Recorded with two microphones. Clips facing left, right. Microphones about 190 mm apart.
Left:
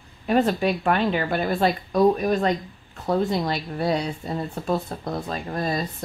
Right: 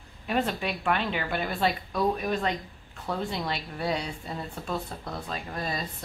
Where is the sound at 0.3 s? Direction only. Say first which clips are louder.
Left 8 dB; 40° left (ahead or behind).